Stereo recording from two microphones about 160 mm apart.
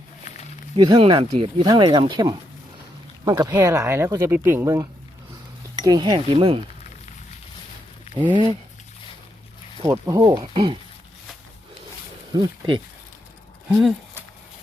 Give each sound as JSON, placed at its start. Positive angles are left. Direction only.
{"t": 0.8, "sound": "speech", "side_deg": -30}
{"t": 1.6, "sound": "speech", "side_deg": -25}
{"t": 8.1, "sound": "speech", "side_deg": -30}
{"t": 9.8, "sound": "speech", "side_deg": -20}
{"t": 12.3, "sound": "speech", "side_deg": -25}